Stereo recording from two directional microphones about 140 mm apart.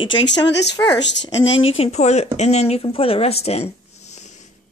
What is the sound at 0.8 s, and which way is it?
Speech, 20° left (ahead or behind).